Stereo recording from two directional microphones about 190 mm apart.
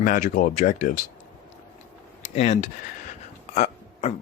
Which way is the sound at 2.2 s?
35° left (ahead or behind).